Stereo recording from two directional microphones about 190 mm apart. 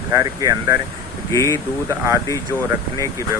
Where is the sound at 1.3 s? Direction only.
15° left (ahead or behind).